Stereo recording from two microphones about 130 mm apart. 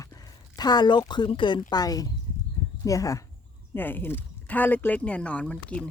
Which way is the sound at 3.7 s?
15° left (ahead or behind).